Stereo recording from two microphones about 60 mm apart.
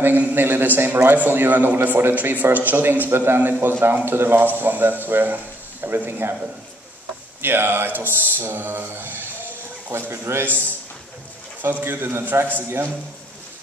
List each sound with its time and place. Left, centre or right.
0.0 s a man's voice: right
7.4 s a man's voice: right
11.6 s a man's voice: right